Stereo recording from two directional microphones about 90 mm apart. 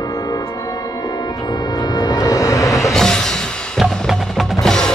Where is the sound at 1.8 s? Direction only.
45° left (ahead or behind).